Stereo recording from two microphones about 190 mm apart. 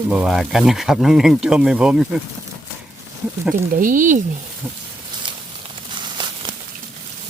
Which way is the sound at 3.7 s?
45° right (ahead or behind).